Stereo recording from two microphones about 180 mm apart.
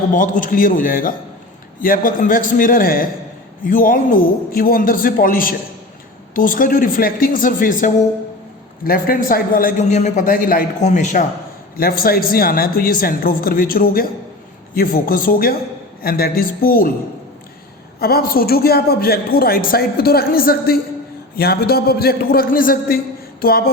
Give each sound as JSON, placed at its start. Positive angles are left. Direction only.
{"t": 0.1, "sound": "a man's voice", "side_deg": 45}
{"t": 11.8, "sound": "a man's voice", "side_deg": 55}
{"t": 18.0, "sound": "a man's voice", "side_deg": 55}
{"t": 23.4, "sound": "a sound", "side_deg": 55}